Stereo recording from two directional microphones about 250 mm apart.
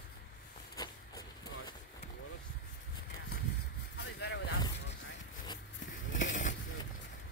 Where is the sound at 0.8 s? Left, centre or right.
Centre.